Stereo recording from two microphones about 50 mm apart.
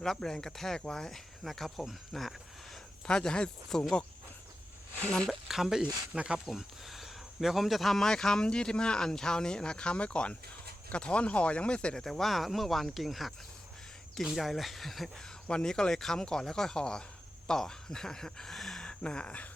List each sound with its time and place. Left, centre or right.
0.0 s speech: centre
3.1 s speech: centre
3.7 s speech: centre
5.0 s speech: centre
5.3 s speech: centre
5.8 s speech: centre
6.4 s speech: centre
12.0 s speech: centre
14.3 s speech: centre
15.2 s speech: centre
18.9 s speech: centre